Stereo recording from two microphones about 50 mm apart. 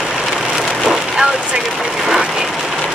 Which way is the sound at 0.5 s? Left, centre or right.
Centre.